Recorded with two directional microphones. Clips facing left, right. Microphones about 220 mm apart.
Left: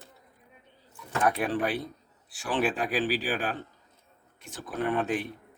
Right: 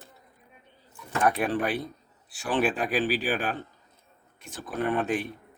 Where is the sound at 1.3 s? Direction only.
55° right (ahead or behind).